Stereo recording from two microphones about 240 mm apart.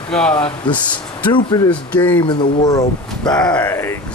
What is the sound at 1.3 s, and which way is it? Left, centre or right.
A man's voice, centre.